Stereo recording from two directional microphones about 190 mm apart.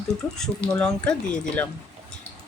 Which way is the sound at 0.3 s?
5° left (ahead or behind).